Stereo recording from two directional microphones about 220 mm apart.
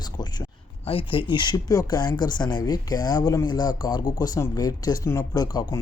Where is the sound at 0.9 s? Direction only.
25° left (ahead or behind).